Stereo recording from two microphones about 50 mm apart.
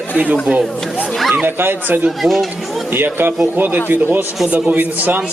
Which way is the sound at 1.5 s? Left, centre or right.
Right.